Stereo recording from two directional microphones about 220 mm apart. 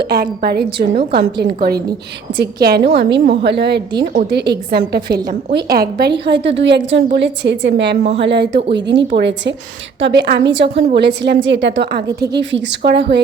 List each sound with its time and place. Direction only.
0.0 s a woman's voice: 45° right (ahead or behind)